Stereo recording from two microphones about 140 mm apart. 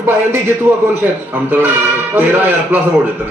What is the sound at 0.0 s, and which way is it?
A man's voice, 15° right (ahead or behind).